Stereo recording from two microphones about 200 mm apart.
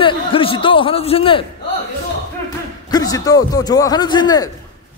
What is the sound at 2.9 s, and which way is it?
A man's voice, 20° left (ahead or behind).